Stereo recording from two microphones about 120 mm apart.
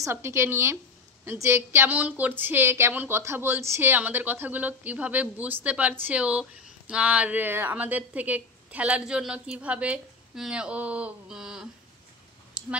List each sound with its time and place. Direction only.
0.0 s a woman's voice: 20° right (ahead or behind); by 11.7 s 5° right (ahead or behind)
12.6 s clicking: 10° right (ahead or behind)